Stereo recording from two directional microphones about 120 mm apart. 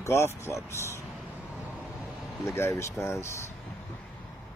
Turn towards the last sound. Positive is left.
turn(degrees=20)  # may be behind; listen again after turning